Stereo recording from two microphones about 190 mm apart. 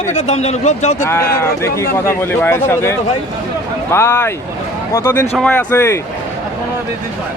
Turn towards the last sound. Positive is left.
turn(degrees=10)  # may be behind; listen again after turning